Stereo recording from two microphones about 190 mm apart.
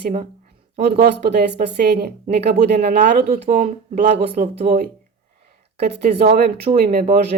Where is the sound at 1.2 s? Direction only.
60° right (ahead or behind).